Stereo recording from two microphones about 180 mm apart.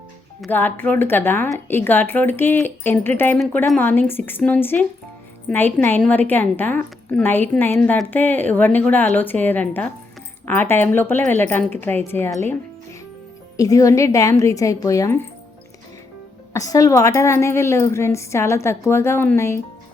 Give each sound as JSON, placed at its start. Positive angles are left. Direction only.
{"t": 0.4, "sound": "a woman's voice", "side_deg": 10}
{"t": 16.5, "sound": "a woman's voice", "side_deg": 20}